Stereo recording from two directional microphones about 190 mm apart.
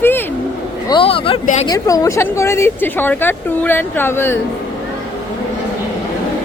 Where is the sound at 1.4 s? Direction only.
40° left (ahead or behind).